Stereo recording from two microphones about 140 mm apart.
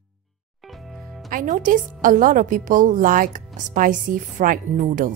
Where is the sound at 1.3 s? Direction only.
70° right (ahead or behind).